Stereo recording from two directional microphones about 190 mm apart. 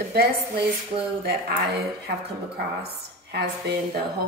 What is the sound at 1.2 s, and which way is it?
Speech, 55° right (ahead or behind).